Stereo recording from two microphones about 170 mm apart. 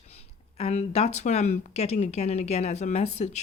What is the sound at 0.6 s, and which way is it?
Speech, 40° left (ahead or behind).